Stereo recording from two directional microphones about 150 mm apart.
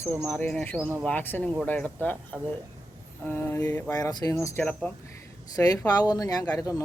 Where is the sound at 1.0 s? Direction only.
15° left (ahead or behind).